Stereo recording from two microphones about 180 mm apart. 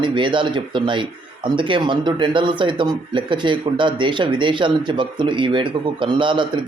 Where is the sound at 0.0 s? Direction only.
25° right (ahead or behind).